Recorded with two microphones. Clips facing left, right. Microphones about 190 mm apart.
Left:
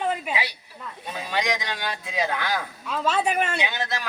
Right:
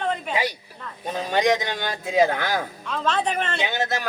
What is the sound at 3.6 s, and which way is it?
Speech, 45° right (ahead or behind).